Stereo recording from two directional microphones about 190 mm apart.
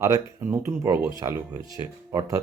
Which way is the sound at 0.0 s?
15° right (ahead or behind).